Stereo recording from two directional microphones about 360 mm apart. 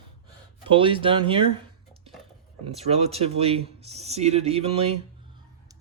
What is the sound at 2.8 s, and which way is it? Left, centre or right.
Speech, centre.